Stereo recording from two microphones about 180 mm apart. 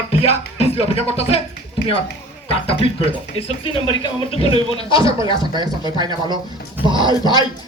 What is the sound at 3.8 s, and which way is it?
Speech, 25° left (ahead or behind).